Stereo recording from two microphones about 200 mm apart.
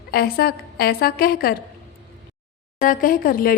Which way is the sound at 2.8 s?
45° left (ahead or behind).